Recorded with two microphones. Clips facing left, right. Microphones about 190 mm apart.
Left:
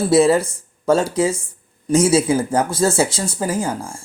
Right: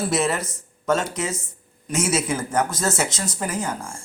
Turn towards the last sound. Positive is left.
turn(degrees=30)  # may be behind; listen again after turning